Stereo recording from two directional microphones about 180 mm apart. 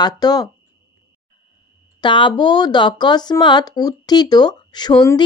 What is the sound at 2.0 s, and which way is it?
Speech, 25° left (ahead or behind).